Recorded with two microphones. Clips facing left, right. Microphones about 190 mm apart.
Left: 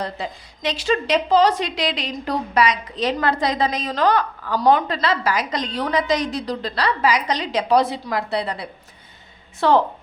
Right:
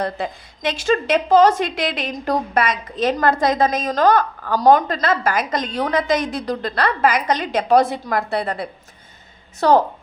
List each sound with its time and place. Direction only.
0.0 s a woman's voice: 55° right (ahead or behind)